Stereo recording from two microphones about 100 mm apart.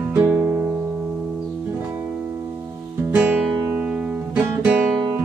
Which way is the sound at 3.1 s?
15° right (ahead or behind).